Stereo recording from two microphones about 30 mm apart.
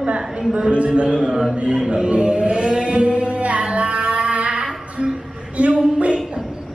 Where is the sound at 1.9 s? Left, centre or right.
Right.